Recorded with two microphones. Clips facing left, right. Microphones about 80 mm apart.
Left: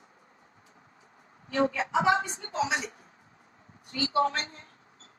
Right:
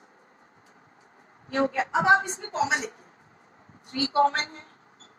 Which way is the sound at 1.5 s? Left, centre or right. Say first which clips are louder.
Right 1 dB; right.